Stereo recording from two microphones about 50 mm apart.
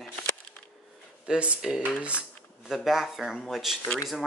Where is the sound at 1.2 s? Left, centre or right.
Right.